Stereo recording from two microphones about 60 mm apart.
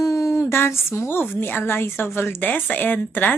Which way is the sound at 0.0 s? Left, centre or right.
Left.